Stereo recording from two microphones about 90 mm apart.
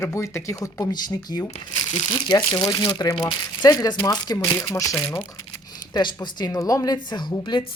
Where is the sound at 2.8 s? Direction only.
60° left (ahead or behind).